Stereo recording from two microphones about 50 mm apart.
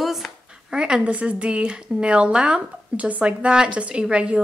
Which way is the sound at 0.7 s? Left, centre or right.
Centre.